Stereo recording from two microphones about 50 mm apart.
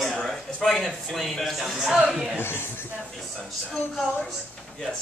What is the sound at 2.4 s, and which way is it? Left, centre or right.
Speech, left.